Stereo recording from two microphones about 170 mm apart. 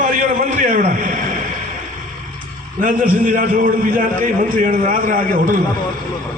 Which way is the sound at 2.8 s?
50° right (ahead or behind).